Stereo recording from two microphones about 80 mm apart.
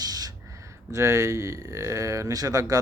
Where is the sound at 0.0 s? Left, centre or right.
Right.